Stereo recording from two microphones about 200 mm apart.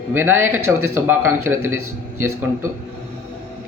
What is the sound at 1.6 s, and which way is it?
Speech, 90° right.